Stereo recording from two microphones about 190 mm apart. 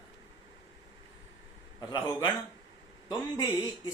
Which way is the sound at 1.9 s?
20° left (ahead or behind).